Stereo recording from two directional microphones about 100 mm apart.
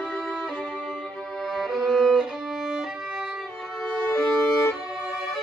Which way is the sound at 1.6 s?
5° right (ahead or behind).